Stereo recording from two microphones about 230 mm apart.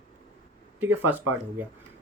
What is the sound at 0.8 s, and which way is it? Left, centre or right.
Speech, centre.